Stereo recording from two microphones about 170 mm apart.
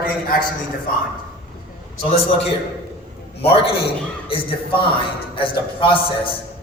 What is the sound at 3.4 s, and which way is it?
A man's voice, 35° left (ahead or behind).